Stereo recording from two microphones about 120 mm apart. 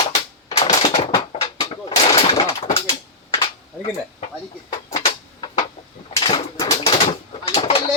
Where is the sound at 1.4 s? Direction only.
55° left (ahead or behind).